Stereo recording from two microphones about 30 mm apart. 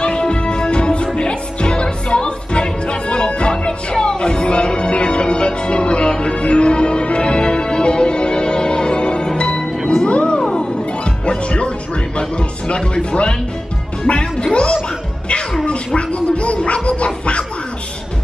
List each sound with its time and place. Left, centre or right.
0.0 s music: left
10.4 s music: centre
11.1 s music: left
14.0 s speech: left
16.0 s cat: left